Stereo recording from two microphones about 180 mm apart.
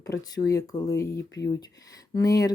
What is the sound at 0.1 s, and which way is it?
Speech, 20° left (ahead or behind).